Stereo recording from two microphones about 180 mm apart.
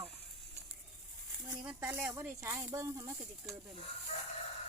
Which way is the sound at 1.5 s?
10° right (ahead or behind).